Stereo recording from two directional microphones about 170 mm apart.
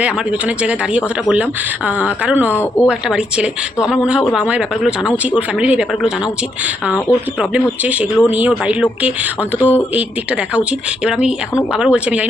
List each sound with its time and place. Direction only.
0.0 s speech: 5° right (ahead or behind)
2.5 s speech: 15° left (ahead or behind)
3.1 s speech: 5° right (ahead or behind)
9.6 s speech: 10° left (ahead or behind)
10.5 s speech: 5° right (ahead or behind)